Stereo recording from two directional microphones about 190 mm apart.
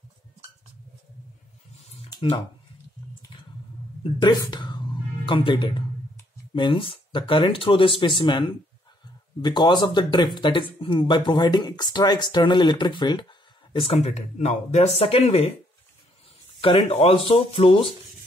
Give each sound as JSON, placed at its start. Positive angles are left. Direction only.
{"t": 1.8, "sound": "a sound", "side_deg": 35}
{"t": 4.0, "sound": "a woman's voice", "side_deg": 25}
{"t": 16.6, "sound": "speech", "side_deg": 30}